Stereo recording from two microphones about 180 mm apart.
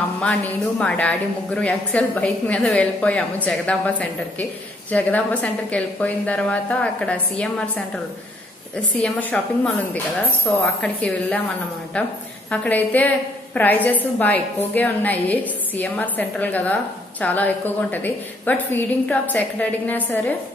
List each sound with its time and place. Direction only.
0.2 s a woman's voice: 5° left (ahead or behind)
12.4 s a woman's voice: 10° left (ahead or behind)